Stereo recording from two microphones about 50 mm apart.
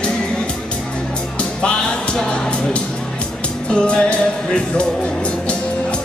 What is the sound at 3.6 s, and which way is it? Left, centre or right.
Music, centre.